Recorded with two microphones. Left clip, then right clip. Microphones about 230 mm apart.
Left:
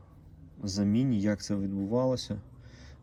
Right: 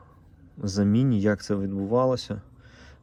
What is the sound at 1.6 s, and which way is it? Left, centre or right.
Speech, centre.